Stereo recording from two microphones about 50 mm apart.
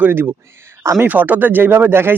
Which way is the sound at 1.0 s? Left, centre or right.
Right.